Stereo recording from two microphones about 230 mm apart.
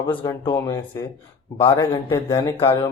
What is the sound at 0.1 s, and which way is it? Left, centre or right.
Speech, centre.